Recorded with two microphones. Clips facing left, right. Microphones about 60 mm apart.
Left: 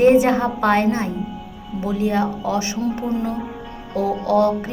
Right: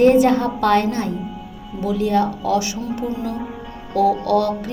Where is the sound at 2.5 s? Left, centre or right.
Left.